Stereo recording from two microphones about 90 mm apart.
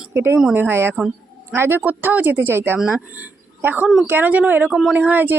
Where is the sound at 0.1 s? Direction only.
30° right (ahead or behind).